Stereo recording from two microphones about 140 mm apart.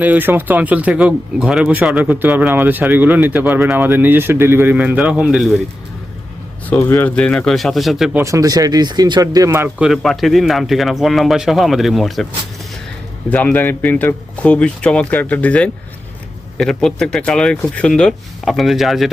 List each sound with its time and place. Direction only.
0.0 s speech: 15° right (ahead or behind)
6.7 s speech: 15° left (ahead or behind); by 8.1 s centre (ahead or behind)
8.1 s speech: 20° right (ahead or behind)
9.6 s speech: 5° right (ahead or behind)
13.3 s speech: 15° left (ahead or behind)